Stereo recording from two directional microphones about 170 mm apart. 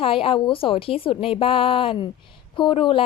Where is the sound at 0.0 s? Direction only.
30° left (ahead or behind).